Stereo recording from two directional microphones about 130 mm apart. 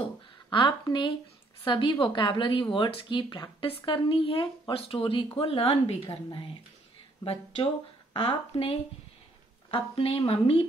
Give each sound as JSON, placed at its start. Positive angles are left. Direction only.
{"t": 0.5, "sound": "a woman's voice", "side_deg": 35}
{"t": 8.1, "sound": "a woman's voice", "side_deg": 45}